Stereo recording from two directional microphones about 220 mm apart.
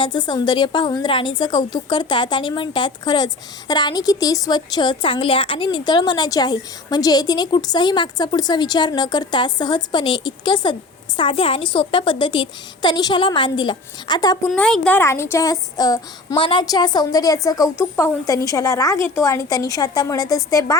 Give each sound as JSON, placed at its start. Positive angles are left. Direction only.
{"t": 0.0, "sound": "a woman's voice", "side_deg": 20}
{"t": 14.5, "sound": "speech", "side_deg": 5}